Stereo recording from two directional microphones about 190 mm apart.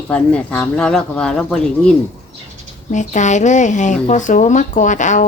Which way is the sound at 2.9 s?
40° left (ahead or behind).